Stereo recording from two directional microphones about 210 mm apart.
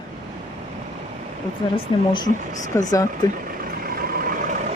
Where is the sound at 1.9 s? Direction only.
25° left (ahead or behind).